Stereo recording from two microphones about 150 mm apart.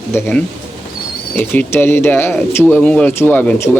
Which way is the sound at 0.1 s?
15° left (ahead or behind).